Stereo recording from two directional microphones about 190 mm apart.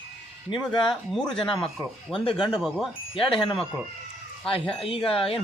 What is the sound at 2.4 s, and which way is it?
Speech, 25° left (ahead or behind).